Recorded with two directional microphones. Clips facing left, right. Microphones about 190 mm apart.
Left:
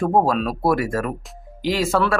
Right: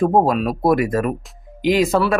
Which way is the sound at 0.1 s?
20° right (ahead or behind).